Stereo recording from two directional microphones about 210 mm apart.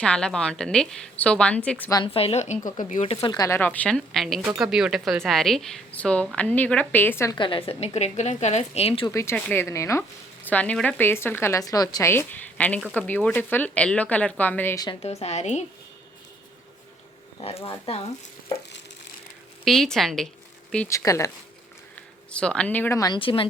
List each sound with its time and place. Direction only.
0.0 s a woman's voice: 5° left (ahead or behind)
1.9 s a woman's voice: 25° left (ahead or behind)
9.1 s a woman's voice: 10° left (ahead or behind)
14.8 s a woman's voice: 30° left (ahead or behind)
17.4 s speech: 25° left (ahead or behind)
19.6 s a woman's voice: centre (ahead or behind)
20.7 s a woman's voice: 15° left (ahead or behind)
22.3 s a woman's voice: 5° left (ahead or behind); by 23.5 s 25° left (ahead or behind)